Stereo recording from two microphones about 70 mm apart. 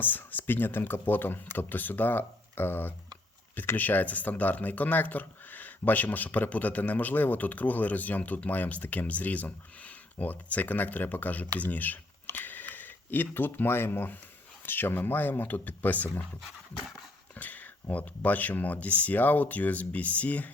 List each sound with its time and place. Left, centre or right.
0.0 s speech: left
17.3 s speech: left